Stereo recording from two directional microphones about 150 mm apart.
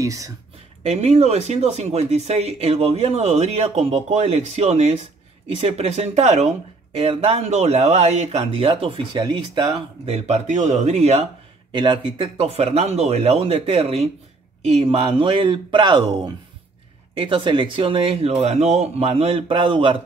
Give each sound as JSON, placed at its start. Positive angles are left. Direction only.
{"t": 0.0, "sound": "speech", "side_deg": -20}
{"t": 0.8, "sound": "speech", "side_deg": -45}
{"t": 10.0, "sound": "speech", "side_deg": -45}
{"t": 11.7, "sound": "speech", "side_deg": -30}
{"t": 17.2, "sound": "speech", "side_deg": -35}